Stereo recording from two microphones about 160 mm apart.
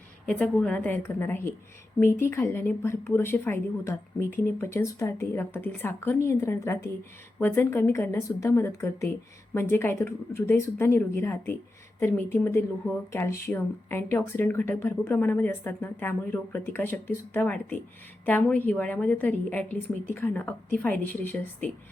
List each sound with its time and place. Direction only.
0.3 s a woman's voice: 5° left (ahead or behind)